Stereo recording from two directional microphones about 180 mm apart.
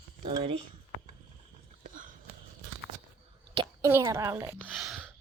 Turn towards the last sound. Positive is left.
turn(degrees=0)  # may be behind; listen again after turning